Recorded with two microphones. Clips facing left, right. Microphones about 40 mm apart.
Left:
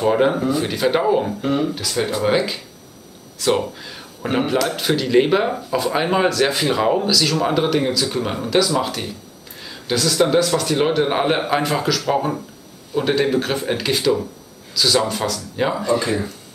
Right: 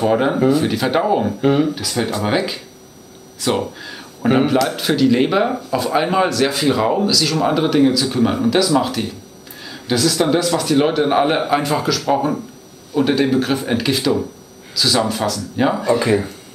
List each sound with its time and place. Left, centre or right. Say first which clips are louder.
0.0 s speech: right 2 dB; centre
1.4 s speech: right 5 dB; right
1.8 s speech: even; centre